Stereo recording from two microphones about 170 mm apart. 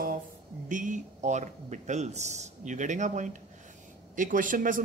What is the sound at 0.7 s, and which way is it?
Speech, 50° right (ahead or behind).